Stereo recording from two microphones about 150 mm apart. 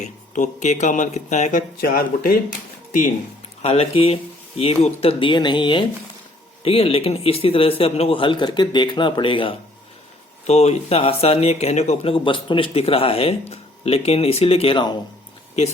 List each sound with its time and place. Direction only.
0.0 s speech: 55° left (ahead or behind)
1.8 s speech: 75° left (ahead or behind)
3.6 s speech: 40° left (ahead or behind)
10.4 s speech: 45° left (ahead or behind)